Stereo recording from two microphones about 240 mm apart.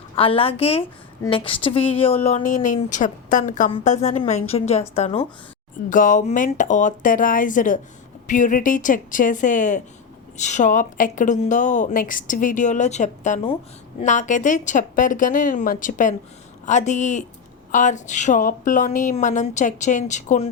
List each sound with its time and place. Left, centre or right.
0.2 s speech: left